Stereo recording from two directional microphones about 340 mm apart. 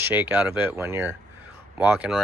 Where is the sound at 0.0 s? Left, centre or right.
Centre.